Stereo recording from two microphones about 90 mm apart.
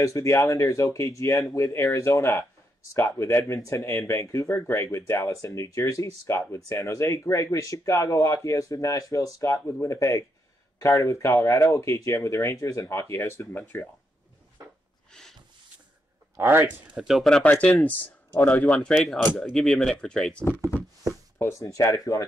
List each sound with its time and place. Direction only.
0.0 s speech: 35° left (ahead or behind)
13.0 s speech: 20° left (ahead or behind)
16.3 s a man's voice: 25° right (ahead or behind)
16.9 s speech: 5° right (ahead or behind)
17.5 s speech: 15° left (ahead or behind)
21.4 s speech: 35° left (ahead or behind)